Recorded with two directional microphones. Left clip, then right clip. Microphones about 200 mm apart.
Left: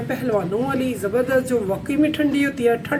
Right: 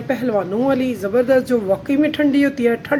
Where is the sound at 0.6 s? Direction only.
40° right (ahead or behind).